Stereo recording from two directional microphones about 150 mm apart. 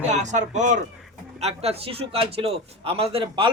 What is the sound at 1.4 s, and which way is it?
A man's voice, 40° right (ahead or behind).